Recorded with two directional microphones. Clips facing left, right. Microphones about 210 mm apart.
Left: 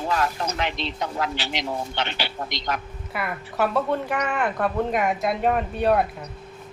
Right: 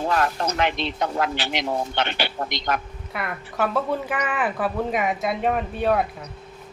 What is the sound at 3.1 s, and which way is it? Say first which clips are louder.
A woman's voice: left 1 dB; centre (ahead or behind).